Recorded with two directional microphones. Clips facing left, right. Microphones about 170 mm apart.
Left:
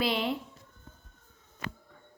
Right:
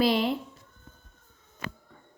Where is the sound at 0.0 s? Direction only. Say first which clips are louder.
Right 6 dB; 40° right (ahead or behind).